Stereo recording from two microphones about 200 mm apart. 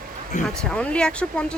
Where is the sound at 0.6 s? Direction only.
5° left (ahead or behind).